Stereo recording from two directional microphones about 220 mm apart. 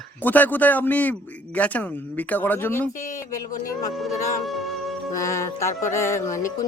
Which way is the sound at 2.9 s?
35° left (ahead or behind).